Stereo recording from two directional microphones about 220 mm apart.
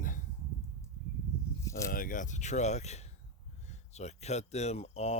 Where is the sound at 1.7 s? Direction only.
15° left (ahead or behind).